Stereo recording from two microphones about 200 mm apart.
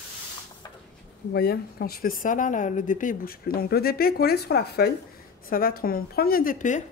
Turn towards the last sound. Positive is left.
turn(degrees=40)  # may be behind; listen again after turning